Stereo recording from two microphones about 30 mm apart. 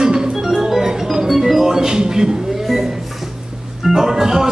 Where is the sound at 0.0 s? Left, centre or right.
Right.